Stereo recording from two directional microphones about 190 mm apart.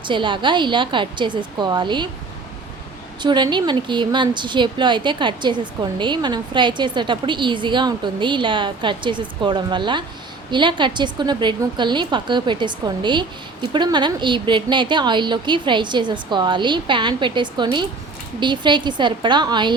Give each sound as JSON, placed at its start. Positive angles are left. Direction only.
{"t": 0.0, "sound": "a woman's voice", "side_deg": -25}
{"t": 3.2, "sound": "a woman's voice", "side_deg": -25}